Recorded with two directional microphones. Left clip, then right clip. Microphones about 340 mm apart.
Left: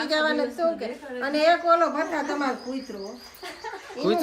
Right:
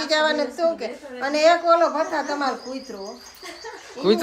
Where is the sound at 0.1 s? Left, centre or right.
Right.